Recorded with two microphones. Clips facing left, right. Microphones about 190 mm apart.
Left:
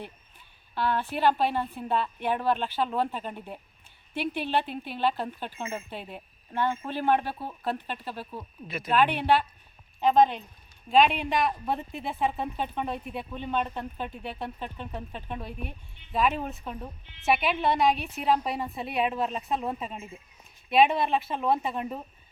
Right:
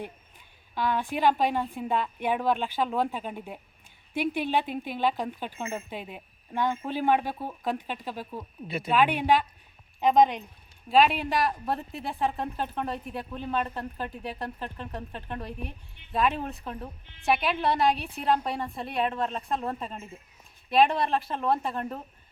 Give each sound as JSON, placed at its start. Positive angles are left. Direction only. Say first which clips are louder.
{"t": 0.8, "sound": "speech", "louder": "even", "side_deg": -15}
{"t": 8.6, "sound": "speech", "louder": "right 4 dB", "side_deg": -30}
{"t": 8.9, "sound": "speech", "louder": "even", "side_deg": -10}